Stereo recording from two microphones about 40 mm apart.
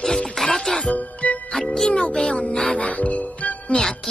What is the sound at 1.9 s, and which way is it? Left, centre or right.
Speech, left.